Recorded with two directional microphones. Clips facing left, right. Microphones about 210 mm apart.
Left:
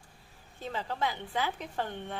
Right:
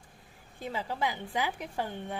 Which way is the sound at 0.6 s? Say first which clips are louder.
Right 1 dB; 10° right (ahead or behind).